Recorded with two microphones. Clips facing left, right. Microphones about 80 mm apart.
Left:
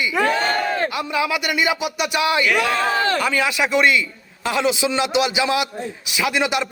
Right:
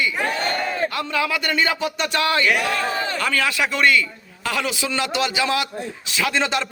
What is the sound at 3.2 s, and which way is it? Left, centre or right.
Speech, centre.